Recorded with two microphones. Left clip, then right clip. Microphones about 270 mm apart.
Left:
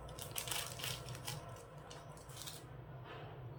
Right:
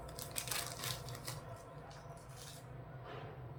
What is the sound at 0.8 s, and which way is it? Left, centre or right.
Crushing, centre.